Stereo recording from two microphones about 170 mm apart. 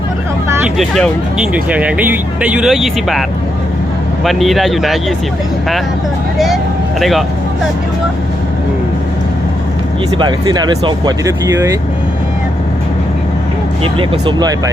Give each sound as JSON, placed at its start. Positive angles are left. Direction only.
{"t": 0.8, "sound": "speech", "side_deg": 0}
{"t": 7.0, "sound": "speech", "side_deg": 0}
{"t": 10.2, "sound": "speech", "side_deg": -25}
{"t": 13.8, "sound": "speech", "side_deg": -30}